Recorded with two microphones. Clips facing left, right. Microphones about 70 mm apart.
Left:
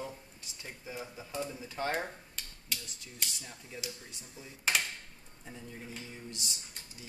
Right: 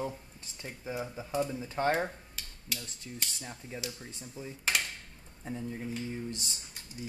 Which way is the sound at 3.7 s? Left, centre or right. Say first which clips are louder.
Right 3 dB; right.